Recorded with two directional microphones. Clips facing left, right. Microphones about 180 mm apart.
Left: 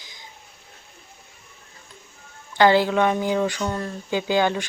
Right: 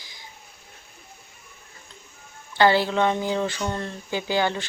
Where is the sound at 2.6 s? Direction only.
15° left (ahead or behind).